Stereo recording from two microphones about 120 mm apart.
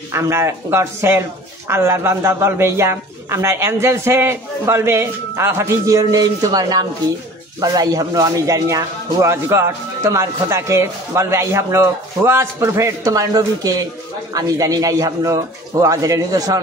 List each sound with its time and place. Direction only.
0.1 s a man's voice: 20° right (ahead or behind)